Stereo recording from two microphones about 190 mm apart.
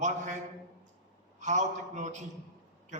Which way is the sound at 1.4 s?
40° right (ahead or behind).